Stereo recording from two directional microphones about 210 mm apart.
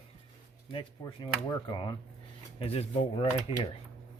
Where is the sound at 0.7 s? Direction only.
20° left (ahead or behind).